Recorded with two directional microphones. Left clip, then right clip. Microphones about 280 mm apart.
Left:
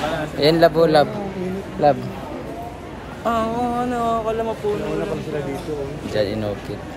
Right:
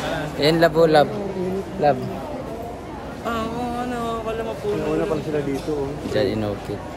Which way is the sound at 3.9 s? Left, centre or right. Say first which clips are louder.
Left 5 dB; centre.